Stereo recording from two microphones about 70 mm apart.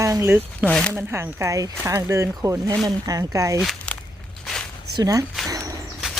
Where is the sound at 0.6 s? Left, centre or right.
Right.